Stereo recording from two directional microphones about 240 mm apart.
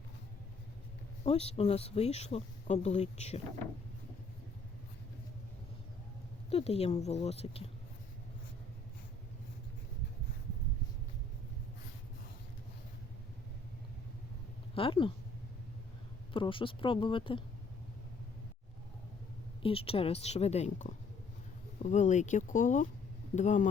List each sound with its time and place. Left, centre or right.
1.2 s speech: left
6.5 s speech: left
14.8 s speech: left
16.3 s speech: left
19.6 s speech: left